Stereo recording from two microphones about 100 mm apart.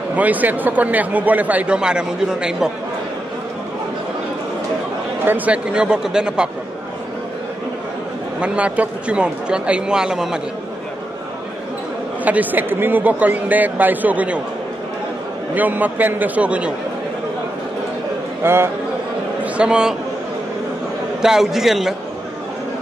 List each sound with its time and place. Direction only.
0.1 s a man's voice: 15° right (ahead or behind)
5.2 s a man's voice: 15° right (ahead or behind)
8.4 s a man's voice: 15° right (ahead or behind)
12.3 s a man's voice: 15° right (ahead or behind)
15.5 s a man's voice: 15° right (ahead or behind)
18.4 s a man's voice: 25° right (ahead or behind)
19.4 s a man's voice: 10° right (ahead or behind)
21.2 s a man's voice: 5° right (ahead or behind)